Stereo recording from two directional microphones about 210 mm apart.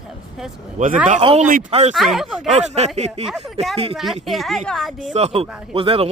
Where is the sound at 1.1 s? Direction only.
30° right (ahead or behind).